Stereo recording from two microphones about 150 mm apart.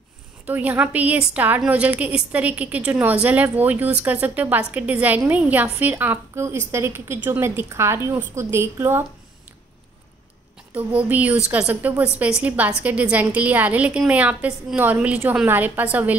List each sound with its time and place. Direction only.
0.5 s a woman's voice: 10° right (ahead or behind)
10.7 s a woman's voice: 10° right (ahead or behind)